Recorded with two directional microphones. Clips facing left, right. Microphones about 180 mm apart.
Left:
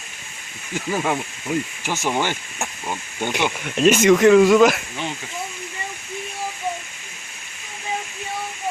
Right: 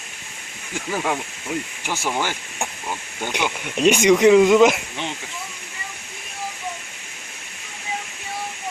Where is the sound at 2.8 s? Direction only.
15° left (ahead or behind).